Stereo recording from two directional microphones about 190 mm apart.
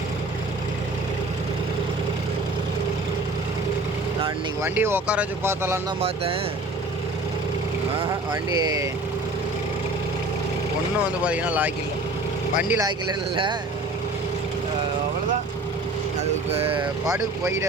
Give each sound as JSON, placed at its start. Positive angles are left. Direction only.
{"t": 4.6, "sound": "speech", "side_deg": -10}
{"t": 8.3, "sound": "speech", "side_deg": -20}
{"t": 11.3, "sound": "speech", "side_deg": -5}
{"t": 13.3, "sound": "speech", "side_deg": -25}
{"t": 16.5, "sound": "speech", "side_deg": -30}
{"t": 16.8, "sound": "speech", "side_deg": -15}